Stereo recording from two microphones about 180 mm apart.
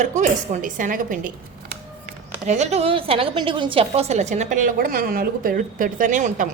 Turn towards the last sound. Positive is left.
turn(degrees=-45)  # may be behind; listen again after turning